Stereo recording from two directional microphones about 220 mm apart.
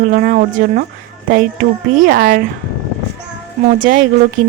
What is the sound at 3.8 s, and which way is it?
Speech, 35° right (ahead or behind).